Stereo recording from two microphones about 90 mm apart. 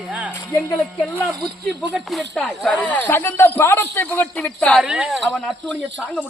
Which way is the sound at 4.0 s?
20° left (ahead or behind).